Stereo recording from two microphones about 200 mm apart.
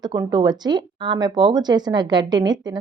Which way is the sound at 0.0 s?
20° right (ahead or behind).